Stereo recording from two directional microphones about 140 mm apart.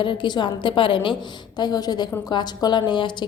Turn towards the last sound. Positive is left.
turn(degrees=30)  # may be behind; listen again after turning